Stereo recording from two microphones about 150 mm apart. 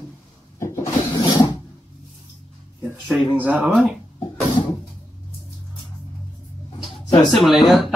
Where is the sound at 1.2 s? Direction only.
30° left (ahead or behind).